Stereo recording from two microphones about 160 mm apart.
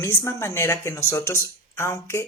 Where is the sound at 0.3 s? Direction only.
15° left (ahead or behind).